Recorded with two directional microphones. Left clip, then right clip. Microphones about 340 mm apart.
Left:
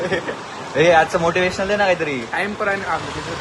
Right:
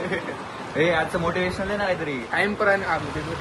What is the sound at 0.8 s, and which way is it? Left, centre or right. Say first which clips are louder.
Speech: left 8 dB; centre.